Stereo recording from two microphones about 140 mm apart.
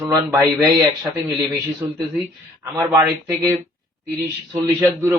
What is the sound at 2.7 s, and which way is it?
Speech, 20° right (ahead or behind).